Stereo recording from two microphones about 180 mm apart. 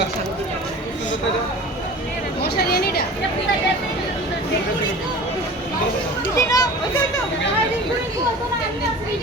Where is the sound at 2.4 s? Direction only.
60° left (ahead or behind).